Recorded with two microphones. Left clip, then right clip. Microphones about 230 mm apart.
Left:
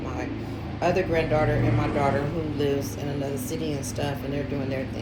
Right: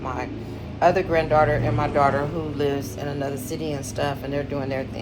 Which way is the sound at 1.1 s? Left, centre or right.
Right.